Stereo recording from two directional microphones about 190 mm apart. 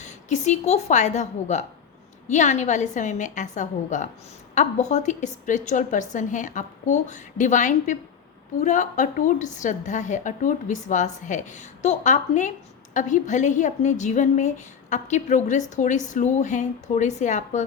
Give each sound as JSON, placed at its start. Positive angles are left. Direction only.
{"t": 0.0, "sound": "a woman's voice", "side_deg": 40}